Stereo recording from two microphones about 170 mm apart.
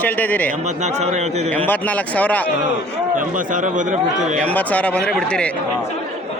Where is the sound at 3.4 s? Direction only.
50° right (ahead or behind).